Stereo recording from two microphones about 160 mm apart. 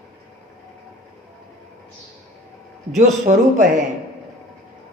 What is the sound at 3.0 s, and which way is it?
Speech, 50° right (ahead or behind).